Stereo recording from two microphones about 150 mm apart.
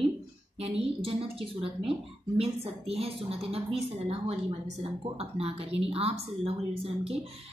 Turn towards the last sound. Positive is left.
turn(degrees=-40)  # may be behind; listen again after turning